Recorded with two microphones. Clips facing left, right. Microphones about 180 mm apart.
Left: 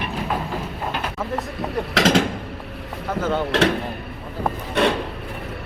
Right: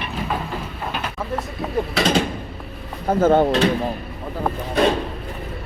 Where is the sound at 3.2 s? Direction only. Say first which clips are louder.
Right 8 dB; 50° right (ahead or behind).